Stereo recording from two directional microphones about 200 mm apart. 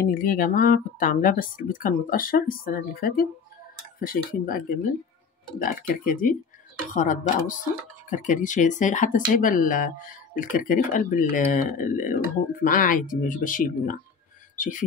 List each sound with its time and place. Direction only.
0.0 s speech: 45° left (ahead or behind)